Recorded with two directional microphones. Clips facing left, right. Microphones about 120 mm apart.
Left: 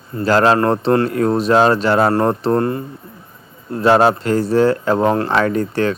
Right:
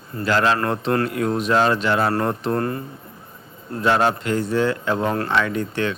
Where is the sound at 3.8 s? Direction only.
35° left (ahead or behind).